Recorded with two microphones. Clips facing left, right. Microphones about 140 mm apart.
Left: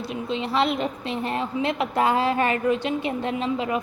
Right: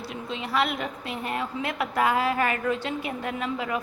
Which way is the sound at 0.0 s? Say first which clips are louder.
Left 6 dB; 20° left (ahead or behind).